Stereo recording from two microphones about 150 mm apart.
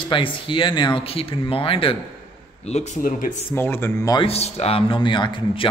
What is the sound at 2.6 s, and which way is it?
Speech, 50° left (ahead or behind).